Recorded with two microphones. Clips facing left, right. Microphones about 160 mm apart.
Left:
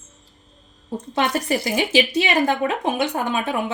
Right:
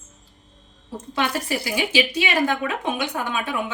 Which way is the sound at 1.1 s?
25° left (ahead or behind).